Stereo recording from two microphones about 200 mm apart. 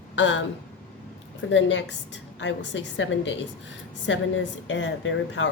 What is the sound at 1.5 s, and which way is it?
Speech, 65° left (ahead or behind).